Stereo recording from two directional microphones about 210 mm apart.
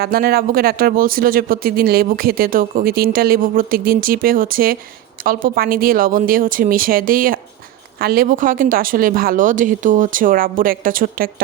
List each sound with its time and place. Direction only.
0.0 s speech: 45° right (ahead or behind)